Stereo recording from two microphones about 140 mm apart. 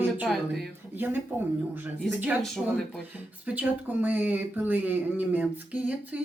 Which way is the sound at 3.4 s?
10° right (ahead or behind).